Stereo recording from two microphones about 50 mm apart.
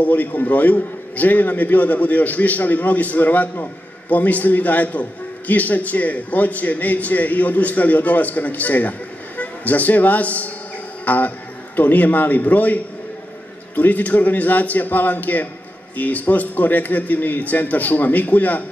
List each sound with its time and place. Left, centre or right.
0.0 s a man's voice: left